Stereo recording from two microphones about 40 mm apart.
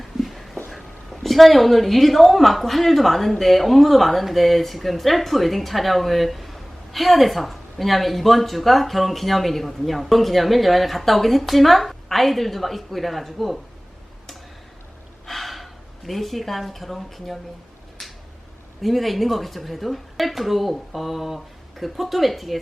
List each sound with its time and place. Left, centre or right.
0.0 s a sound: centre
1.1 s a woman's voice: centre
15.3 s speech: centre
18.8 s a woman's voice: centre